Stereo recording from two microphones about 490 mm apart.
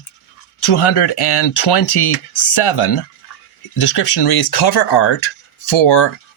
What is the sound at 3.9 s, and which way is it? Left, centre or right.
Speech, left.